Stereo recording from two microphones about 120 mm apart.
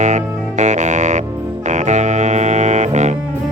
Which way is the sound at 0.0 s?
80° right.